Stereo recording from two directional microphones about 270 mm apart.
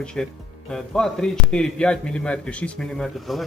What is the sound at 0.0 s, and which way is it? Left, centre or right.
A man's voice, centre.